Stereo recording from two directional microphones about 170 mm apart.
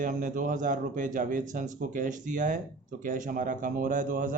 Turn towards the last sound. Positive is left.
turn(degrees=-50)  # may be behind; listen again after turning